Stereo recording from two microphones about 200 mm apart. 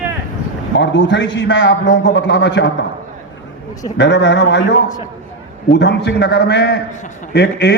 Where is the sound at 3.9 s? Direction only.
60° left (ahead or behind).